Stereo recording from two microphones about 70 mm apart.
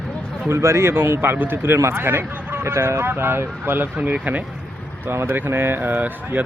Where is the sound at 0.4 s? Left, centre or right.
Right.